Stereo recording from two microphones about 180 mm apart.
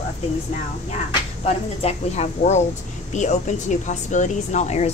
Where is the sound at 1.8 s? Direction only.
40° left (ahead or behind).